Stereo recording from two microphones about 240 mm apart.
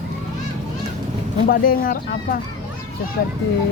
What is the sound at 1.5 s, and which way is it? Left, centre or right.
Speech, left.